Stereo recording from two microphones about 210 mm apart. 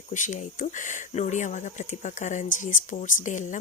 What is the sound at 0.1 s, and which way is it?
Speech, 35° left (ahead or behind).